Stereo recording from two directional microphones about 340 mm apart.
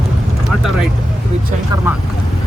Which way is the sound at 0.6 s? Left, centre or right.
Centre.